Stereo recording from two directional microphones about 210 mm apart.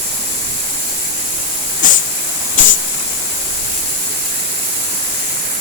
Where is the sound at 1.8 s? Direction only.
40° left (ahead or behind).